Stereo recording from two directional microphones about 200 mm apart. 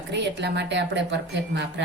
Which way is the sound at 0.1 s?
60° right (ahead or behind).